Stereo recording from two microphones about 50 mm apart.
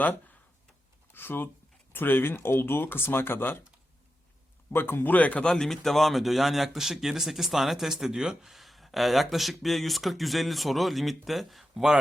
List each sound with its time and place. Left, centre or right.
1.1 s speech: left
4.7 s speech: left
5.1 s speech: left
5.5 s speech: centre
8.4 s speech: centre